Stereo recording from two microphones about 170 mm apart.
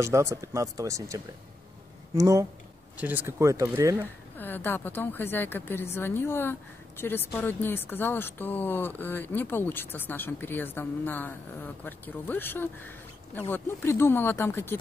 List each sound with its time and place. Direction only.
0.0 s speech: 15° right (ahead or behind)
4.4 s speech: 10° left (ahead or behind)